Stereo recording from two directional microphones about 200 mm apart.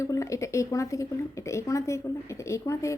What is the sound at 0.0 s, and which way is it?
Speech, 15° left (ahead or behind).